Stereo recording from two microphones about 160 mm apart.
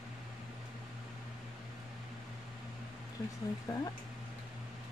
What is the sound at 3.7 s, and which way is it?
Speech, 20° left (ahead or behind).